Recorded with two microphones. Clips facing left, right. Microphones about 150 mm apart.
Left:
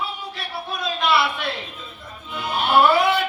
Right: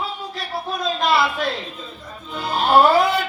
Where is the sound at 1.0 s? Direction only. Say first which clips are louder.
Right 1 dB; 40° right (ahead or behind).